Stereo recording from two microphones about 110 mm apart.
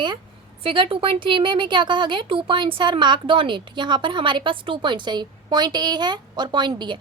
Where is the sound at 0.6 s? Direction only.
55° right (ahead or behind).